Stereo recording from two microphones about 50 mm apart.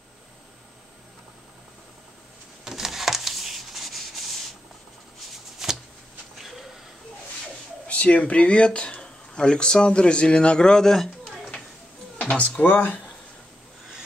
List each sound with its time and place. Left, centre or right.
2.6 s a sound: centre
5.6 s shuffling cards: centre
7.8 s speech: left; by 11.1 s centre
12.2 s speech: left